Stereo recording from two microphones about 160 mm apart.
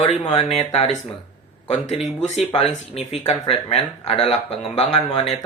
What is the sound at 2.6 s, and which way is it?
Speech, 40° left (ahead or behind).